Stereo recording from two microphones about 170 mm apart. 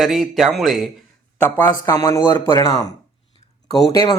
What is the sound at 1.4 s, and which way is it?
Speech, 10° left (ahead or behind).